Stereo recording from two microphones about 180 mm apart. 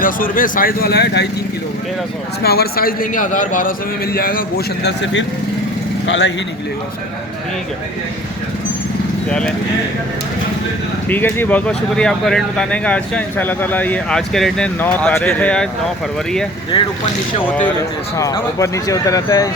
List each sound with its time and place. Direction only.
0.0 s speech: 50° left (ahead or behind); by 1.3 s 65° left (ahead or behind)
2.4 s a man's voice: 60° left (ahead or behind)
6.1 s a man's voice: 80° left
11.1 s speech: 10° left (ahead or behind)
17.5 s speech: 10° left (ahead or behind)